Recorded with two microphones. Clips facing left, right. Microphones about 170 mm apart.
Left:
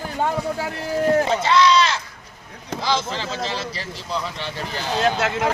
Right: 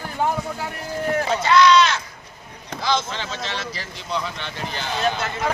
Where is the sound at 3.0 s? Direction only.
35° left (ahead or behind).